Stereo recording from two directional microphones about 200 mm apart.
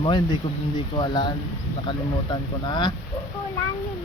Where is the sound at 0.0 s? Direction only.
25° left (ahead or behind).